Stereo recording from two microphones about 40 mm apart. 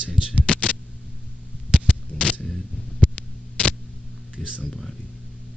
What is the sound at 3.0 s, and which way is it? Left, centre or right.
Hum, left.